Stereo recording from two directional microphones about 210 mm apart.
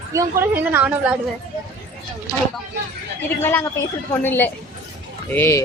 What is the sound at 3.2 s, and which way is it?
A woman's voice, 10° left (ahead or behind).